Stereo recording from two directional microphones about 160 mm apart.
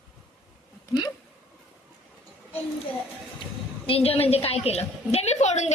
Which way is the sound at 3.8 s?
35° left (ahead or behind).